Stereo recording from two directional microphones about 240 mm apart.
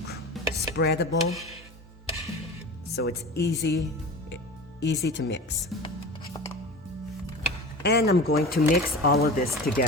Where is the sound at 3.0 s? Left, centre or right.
Left.